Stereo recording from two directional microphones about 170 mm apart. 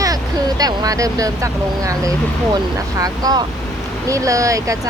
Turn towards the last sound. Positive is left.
turn(degrees=-20)  # may be behind; listen again after turning